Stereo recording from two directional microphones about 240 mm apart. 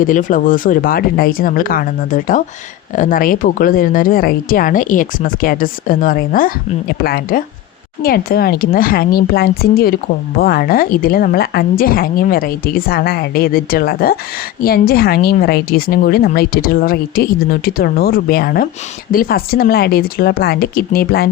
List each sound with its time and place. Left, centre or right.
0.0 s a woman's voice: left